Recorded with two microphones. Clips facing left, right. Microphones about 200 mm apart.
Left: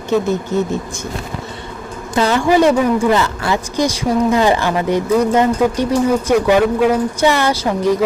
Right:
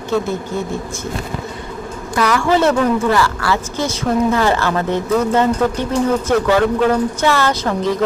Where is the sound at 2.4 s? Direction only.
15° left (ahead or behind).